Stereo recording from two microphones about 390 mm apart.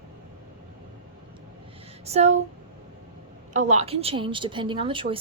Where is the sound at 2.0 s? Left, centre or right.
Centre.